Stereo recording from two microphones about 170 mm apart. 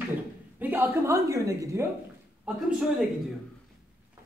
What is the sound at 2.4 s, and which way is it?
Speech, 5° right (ahead or behind).